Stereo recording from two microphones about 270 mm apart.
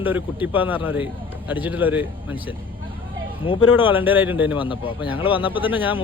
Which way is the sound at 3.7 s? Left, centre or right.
Centre.